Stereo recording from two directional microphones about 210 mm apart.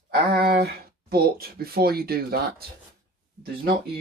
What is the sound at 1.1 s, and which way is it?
Speech, 45° right (ahead or behind).